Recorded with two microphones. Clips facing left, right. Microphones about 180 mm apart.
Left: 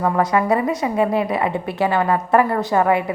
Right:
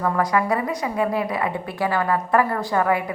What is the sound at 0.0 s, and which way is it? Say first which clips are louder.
A woman's voice: left 3 dB; 25° left (ahead or behind).